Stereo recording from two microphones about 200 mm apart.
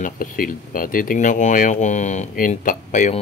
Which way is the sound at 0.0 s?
45° left (ahead or behind).